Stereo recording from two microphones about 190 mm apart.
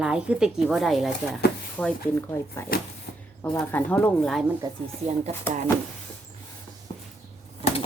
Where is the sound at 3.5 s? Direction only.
10° left (ahead or behind).